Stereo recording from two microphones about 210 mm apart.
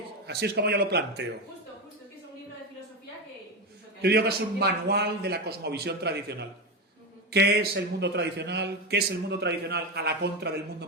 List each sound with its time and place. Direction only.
0.3 s a man's voice: 50° right (ahead or behind)
4.0 s a man's voice: 50° right (ahead or behind)